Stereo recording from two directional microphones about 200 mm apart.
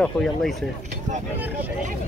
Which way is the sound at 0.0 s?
Centre (ahead or behind).